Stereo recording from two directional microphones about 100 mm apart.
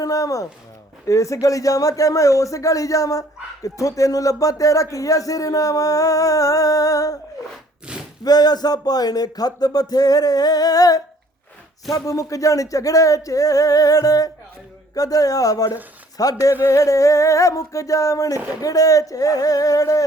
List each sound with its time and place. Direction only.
0.0 s speech: 35° left (ahead or behind)
8.2 s speech: 40° left (ahead or behind)